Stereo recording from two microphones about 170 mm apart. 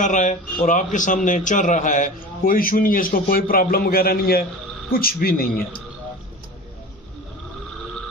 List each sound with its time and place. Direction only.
0.0 s a man's voice: 45° left (ahead or behind)